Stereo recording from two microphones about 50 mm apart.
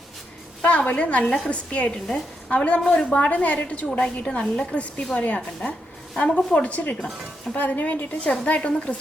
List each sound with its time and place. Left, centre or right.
0.6 s a woman's voice: left
1.9 s speech: centre
2.5 s a woman's voice: left